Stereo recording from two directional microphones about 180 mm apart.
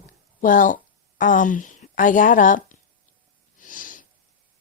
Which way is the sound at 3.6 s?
50° left (ahead or behind).